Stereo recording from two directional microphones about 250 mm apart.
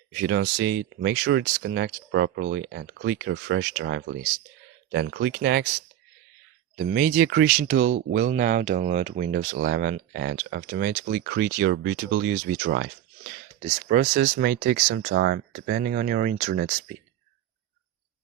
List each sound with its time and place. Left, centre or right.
0.1 s speech: right
6.7 s speech: right